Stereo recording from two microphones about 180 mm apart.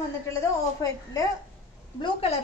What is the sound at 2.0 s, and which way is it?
Speech, 30° left (ahead or behind).